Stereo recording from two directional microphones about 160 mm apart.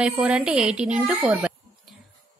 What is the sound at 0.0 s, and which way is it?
A woman's voice, 5° right (ahead or behind).